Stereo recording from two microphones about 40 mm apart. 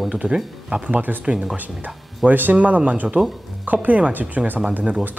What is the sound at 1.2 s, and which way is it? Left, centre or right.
Speech, right.